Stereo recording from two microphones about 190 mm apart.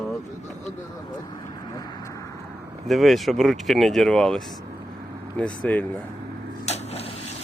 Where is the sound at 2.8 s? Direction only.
Centre (ahead or behind).